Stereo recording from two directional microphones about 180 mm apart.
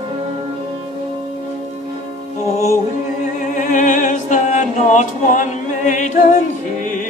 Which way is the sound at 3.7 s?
45° left (ahead or behind).